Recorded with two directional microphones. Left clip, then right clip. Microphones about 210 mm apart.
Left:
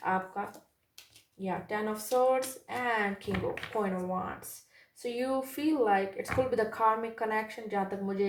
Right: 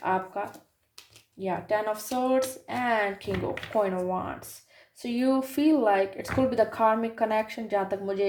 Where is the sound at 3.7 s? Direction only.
35° right (ahead or behind).